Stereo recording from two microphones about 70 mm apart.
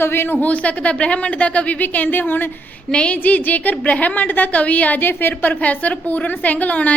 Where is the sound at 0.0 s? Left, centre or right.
Left.